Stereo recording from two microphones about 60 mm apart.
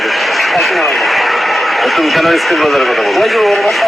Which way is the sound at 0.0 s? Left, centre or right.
Centre.